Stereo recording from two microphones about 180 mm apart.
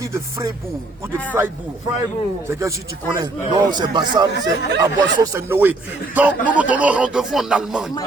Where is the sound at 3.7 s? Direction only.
25° right (ahead or behind).